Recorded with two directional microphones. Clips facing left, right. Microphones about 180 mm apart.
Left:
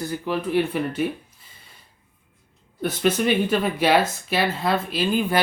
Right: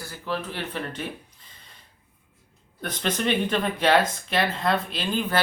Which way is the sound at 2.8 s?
5° left (ahead or behind).